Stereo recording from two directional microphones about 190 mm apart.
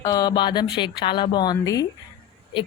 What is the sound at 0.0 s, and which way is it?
A woman's voice, 20° left (ahead or behind).